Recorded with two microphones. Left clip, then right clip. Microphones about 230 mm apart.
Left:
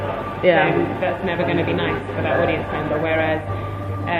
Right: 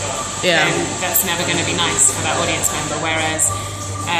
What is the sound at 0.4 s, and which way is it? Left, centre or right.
Speech, right.